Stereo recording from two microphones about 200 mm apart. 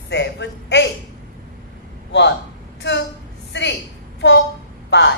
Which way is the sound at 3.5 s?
60° left (ahead or behind).